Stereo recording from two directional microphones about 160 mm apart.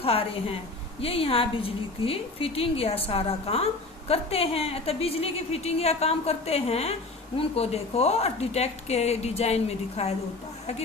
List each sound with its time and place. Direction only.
0.0 s a woman's voice: 35° left (ahead or behind)